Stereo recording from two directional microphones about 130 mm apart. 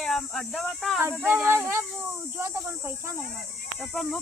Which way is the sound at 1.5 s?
20° right (ahead or behind).